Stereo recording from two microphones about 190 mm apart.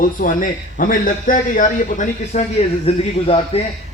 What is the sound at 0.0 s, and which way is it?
A man's voice, 45° left (ahead or behind).